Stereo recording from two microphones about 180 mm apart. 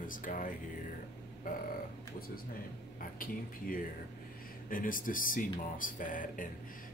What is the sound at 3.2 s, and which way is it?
Speech, 50° left (ahead or behind).